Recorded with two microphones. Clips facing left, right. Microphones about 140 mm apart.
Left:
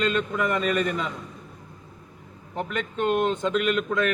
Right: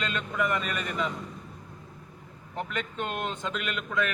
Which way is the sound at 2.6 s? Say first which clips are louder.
Left 6 dB; 35° left (ahead or behind).